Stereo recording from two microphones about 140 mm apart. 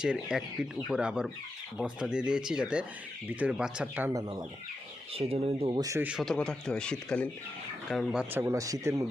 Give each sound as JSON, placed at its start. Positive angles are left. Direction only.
{"t": 0.0, "sound": "speech", "side_deg": -5}
{"t": 4.1, "sound": "speech", "side_deg": -25}
{"t": 5.1, "sound": "speech", "side_deg": -45}
{"t": 5.7, "sound": "speech", "side_deg": -25}
{"t": 6.0, "sound": "speech", "side_deg": -10}
{"t": 6.2, "sound": "a man's voice", "side_deg": 5}
{"t": 8.2, "sound": "speech", "side_deg": -15}